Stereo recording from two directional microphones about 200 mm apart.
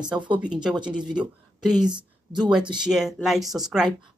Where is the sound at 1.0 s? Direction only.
20° right (ahead or behind).